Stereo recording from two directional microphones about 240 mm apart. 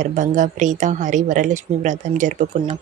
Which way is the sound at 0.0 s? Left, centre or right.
Right.